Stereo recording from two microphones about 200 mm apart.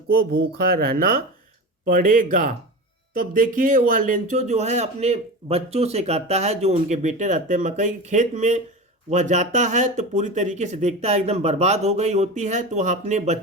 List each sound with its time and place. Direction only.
0.1 s a man's voice: 50° right (ahead or behind)